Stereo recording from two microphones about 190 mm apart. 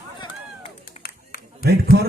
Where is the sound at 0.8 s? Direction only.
50° left (ahead or behind).